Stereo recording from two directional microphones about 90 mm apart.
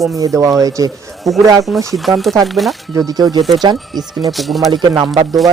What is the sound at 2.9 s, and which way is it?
Speech, 45° right (ahead or behind).